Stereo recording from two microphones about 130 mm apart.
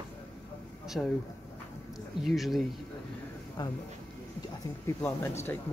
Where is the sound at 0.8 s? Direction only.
5° right (ahead or behind).